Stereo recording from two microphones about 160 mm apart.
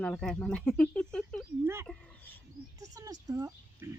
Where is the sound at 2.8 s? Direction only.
20° right (ahead or behind).